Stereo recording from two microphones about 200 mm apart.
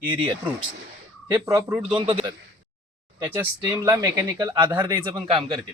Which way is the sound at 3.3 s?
10° right (ahead or behind).